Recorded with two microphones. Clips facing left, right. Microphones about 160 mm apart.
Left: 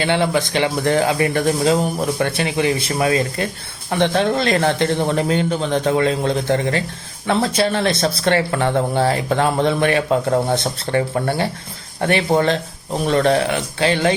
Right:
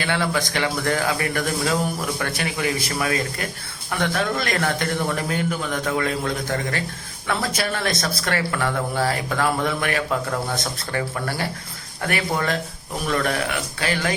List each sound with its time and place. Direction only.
0.0 s speech: 25° left (ahead or behind)